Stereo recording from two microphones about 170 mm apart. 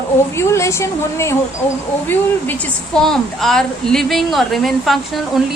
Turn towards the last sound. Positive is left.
turn(degrees=0)  # may be behind; listen again after turning